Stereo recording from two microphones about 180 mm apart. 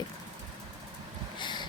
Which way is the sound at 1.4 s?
25° left (ahead or behind).